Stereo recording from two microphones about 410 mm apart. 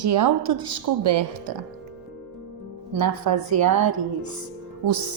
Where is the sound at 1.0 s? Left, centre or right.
Right.